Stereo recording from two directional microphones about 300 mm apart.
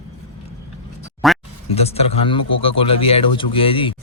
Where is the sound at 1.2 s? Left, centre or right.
Centre.